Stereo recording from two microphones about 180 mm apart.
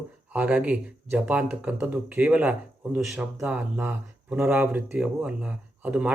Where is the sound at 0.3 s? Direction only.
5° right (ahead or behind).